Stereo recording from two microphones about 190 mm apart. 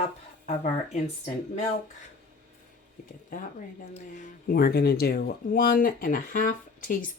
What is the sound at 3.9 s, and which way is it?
Speech, 40° left (ahead or behind).